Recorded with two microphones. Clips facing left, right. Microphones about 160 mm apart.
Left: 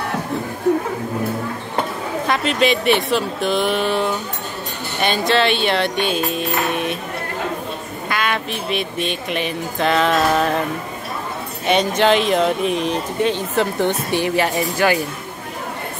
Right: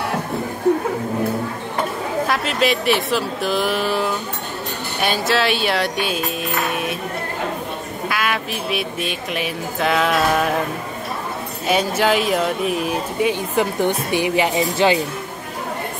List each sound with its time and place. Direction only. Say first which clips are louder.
2.2 s speech: left 3 dB; 5° right (ahead or behind)
8.1 s speech: left 2 dB; 5° right (ahead or behind)
11.6 s speech: left 2 dB; 5° right (ahead or behind)